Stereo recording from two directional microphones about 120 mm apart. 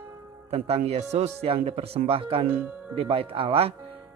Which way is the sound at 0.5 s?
60° right (ahead or behind).